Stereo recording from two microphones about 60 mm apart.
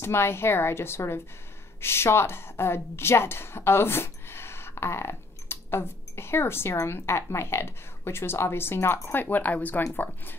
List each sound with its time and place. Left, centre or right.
0.0 s a woman's voice: left
9.1 s speech: left